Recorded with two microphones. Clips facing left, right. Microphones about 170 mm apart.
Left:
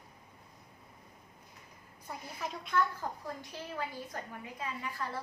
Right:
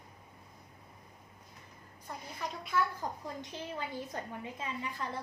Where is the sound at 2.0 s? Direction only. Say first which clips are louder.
Even; centre (ahead or behind).